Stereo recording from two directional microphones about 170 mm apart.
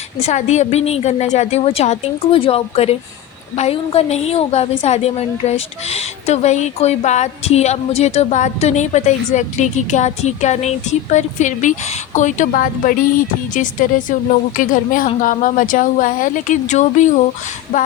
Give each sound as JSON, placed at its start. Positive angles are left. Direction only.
{"t": 0.2, "sound": "a woman's voice", "side_deg": 40}